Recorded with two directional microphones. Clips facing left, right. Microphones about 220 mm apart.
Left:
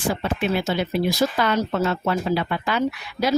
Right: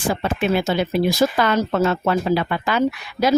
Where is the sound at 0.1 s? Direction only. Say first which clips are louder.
Right 3 dB; 90° right.